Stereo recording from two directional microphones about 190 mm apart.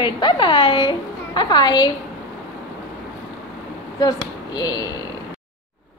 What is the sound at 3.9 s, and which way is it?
Speech, 20° left (ahead or behind).